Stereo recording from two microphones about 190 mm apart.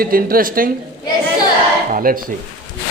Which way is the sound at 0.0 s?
50° right (ahead or behind).